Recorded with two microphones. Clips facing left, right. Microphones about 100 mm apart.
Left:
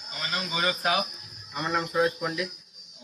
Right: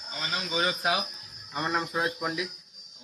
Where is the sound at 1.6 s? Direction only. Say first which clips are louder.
Left 3 dB; 15° right (ahead or behind).